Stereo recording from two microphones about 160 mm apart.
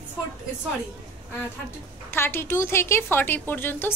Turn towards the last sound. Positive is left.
turn(degrees=15)  # may be behind; listen again after turning